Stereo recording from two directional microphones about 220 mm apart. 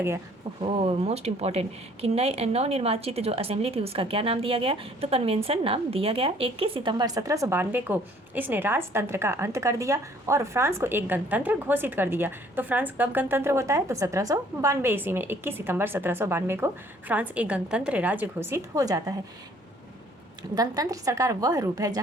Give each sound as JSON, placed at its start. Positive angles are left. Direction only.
{"t": 0.6, "sound": "a woman's voice", "side_deg": -25}
{"t": 20.6, "sound": "speech", "side_deg": -15}